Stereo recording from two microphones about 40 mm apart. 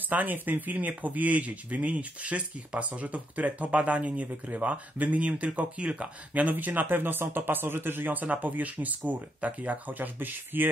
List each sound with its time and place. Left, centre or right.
0.1 s speech: right